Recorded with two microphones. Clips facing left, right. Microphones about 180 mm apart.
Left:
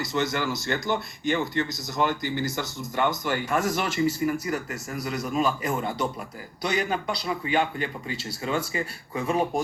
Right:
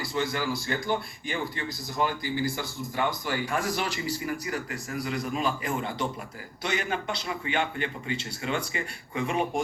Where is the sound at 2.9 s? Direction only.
45° left (ahead or behind).